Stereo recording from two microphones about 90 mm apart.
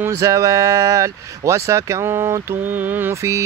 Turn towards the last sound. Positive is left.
turn(degrees=-30)  # may be behind; listen again after turning